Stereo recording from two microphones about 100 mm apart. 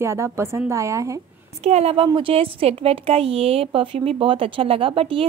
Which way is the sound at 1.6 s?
90° right.